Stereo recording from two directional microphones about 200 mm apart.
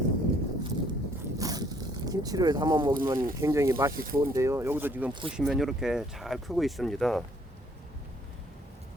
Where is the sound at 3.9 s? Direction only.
45° right (ahead or behind).